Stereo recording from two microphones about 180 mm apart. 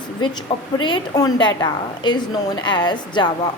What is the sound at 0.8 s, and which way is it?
A woman's voice, 25° left (ahead or behind).